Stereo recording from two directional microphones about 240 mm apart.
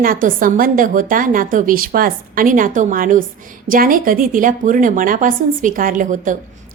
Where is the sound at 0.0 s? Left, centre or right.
Right.